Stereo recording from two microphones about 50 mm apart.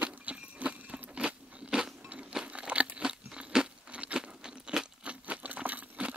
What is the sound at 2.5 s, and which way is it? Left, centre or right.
Crunch, right.